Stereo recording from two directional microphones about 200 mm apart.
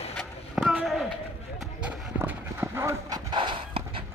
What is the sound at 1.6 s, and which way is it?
Clip-clop, 5° right (ahead or behind).